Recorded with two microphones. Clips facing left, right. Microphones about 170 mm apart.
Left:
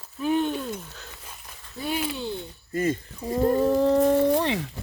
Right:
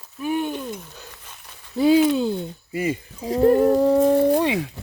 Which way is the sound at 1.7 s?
90° right.